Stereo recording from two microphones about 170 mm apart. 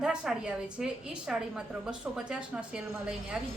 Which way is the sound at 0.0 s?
5° right (ahead or behind).